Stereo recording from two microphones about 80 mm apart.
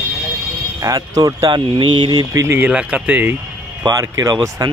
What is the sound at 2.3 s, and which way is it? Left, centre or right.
Speech, right.